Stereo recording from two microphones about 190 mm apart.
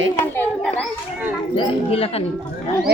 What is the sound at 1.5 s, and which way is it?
Speech, 30° left (ahead or behind).